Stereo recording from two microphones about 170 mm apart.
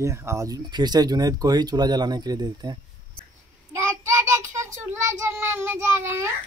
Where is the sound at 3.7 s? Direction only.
15° right (ahead or behind).